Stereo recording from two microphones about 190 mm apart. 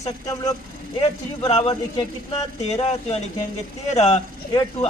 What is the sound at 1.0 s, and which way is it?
Speech, 30° left (ahead or behind).